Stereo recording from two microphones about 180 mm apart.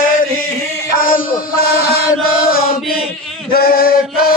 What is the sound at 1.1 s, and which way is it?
Chant, 50° left (ahead or behind).